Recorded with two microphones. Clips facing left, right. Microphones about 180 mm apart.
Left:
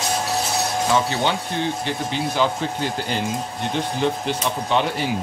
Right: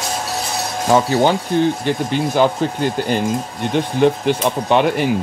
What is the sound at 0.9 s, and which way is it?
Speech, 45° right (ahead or behind).